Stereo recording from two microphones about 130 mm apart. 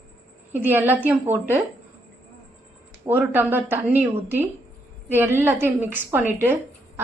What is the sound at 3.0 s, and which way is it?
A woman's voice, 15° right (ahead or behind).